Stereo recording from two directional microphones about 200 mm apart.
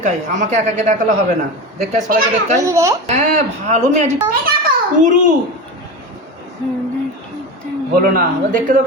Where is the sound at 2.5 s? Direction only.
15° right (ahead or behind).